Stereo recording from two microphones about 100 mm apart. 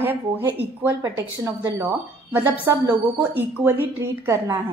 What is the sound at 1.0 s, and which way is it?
A woman's voice, 30° right (ahead or behind).